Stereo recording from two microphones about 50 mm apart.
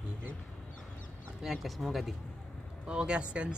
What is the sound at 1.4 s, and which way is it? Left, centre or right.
Speech, centre.